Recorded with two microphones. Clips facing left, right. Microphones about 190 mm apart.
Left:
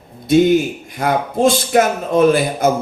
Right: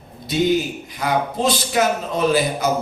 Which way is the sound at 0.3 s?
50° left (ahead or behind).